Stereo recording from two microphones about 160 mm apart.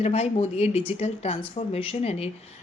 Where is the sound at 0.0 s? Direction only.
40° left (ahead or behind).